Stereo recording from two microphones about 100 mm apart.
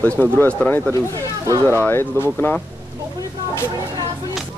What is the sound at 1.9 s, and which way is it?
Speech, 25° left (ahead or behind).